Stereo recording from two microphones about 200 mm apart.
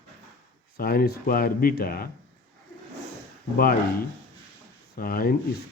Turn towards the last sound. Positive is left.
turn(degrees=45)  # may be behind; listen again after turning